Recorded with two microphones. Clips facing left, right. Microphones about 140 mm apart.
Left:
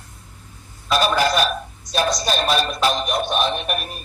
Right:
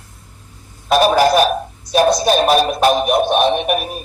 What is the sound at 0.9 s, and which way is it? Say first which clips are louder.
Speech: right 7 dB; 55° right (ahead or behind).